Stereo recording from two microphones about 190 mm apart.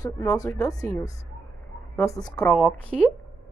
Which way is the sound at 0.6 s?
20° left (ahead or behind).